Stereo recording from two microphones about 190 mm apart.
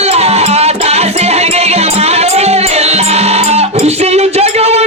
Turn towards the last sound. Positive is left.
turn(degrees=-35)  # may be behind; listen again after turning